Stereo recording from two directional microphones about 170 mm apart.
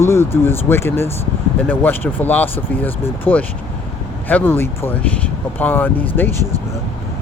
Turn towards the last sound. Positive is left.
turn(degrees=10)  # may be behind; listen again after turning